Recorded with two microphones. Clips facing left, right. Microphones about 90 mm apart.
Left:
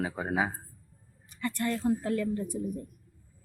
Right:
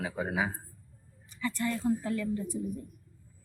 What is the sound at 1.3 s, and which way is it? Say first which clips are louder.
A woman's voice: left 1 dB; 55° left (ahead or behind).